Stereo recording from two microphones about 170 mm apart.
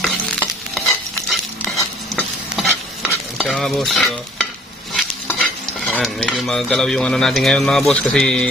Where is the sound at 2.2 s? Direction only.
Centre (ahead or behind).